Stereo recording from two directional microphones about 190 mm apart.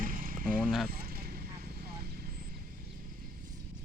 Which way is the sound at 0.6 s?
Centre (ahead or behind).